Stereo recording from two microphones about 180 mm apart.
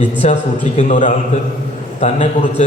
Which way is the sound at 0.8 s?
45° left (ahead or behind).